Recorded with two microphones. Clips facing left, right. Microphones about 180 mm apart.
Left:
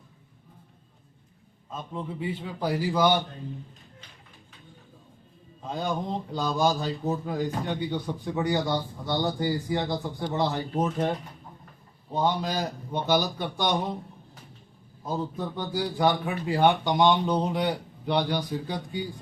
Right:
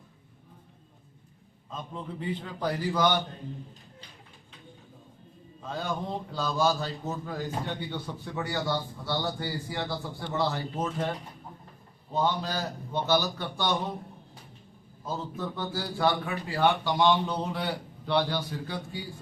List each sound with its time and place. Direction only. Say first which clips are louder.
1.7 s a man's voice: left 3 dB; 5° left (ahead or behind)
5.6 s a man's voice: left 3 dB; 15° left (ahead or behind)
12.1 s a man's voice: left 2 dB; 15° left (ahead or behind)
15.0 s a man's voice: left 3 dB; 15° left (ahead or behind)